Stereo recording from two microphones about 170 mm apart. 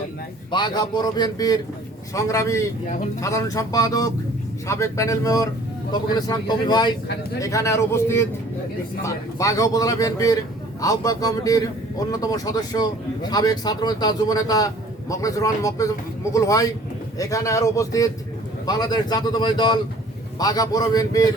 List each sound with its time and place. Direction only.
0.5 s a man's voice: 25° left (ahead or behind)